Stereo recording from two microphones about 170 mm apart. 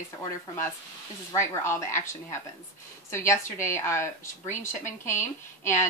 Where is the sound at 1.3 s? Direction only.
15° left (ahead or behind).